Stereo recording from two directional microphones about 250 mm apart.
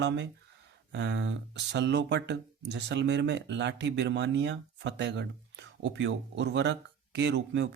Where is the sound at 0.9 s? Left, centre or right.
Right.